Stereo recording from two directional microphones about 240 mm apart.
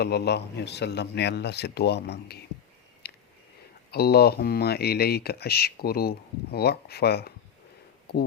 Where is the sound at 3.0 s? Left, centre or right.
Left.